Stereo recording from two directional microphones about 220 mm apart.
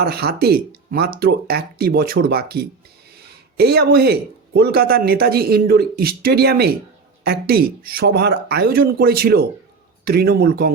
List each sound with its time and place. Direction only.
0.0 s speech: 45° right (ahead or behind)